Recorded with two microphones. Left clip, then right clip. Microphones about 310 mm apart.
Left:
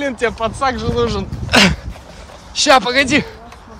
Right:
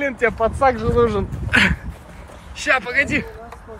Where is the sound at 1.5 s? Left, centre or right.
Centre.